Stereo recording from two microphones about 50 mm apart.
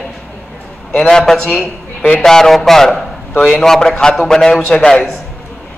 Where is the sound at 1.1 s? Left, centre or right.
Centre.